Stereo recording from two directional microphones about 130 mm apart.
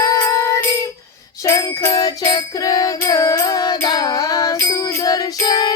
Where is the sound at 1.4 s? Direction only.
25° left (ahead or behind).